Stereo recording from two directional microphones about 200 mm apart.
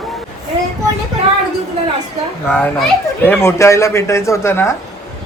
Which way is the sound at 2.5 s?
5° left (ahead or behind).